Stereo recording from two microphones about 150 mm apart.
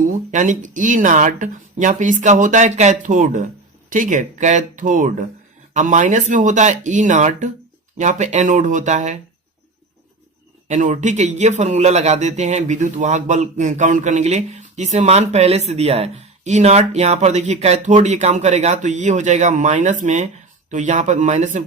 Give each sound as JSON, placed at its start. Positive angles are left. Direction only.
{"t": 0.3, "sound": "speech", "side_deg": -55}
{"t": 10.7, "sound": "speech", "side_deg": -55}